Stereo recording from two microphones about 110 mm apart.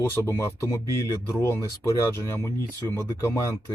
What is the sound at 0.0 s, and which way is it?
Speech, 25° left (ahead or behind).